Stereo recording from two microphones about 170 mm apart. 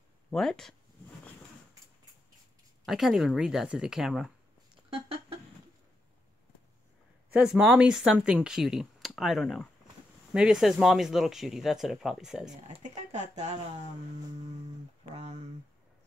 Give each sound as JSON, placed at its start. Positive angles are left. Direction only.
{"t": 0.3, "sound": "speech", "side_deg": 5}
{"t": 2.8, "sound": "speech", "side_deg": 0}
{"t": 4.9, "sound": "a sound", "side_deg": -35}
{"t": 7.3, "sound": "speech", "side_deg": -5}
{"t": 12.6, "sound": "speech", "side_deg": -45}